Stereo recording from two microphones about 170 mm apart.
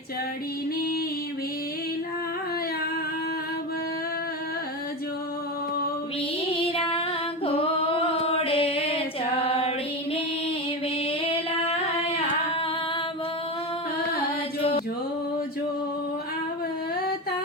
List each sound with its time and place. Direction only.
6.5 s child singing: 35° left (ahead or behind)
7.4 s a sound: 35° left (ahead or behind)
9.4 s music: 35° left (ahead or behind)
11.3 s singing: 35° left (ahead or behind)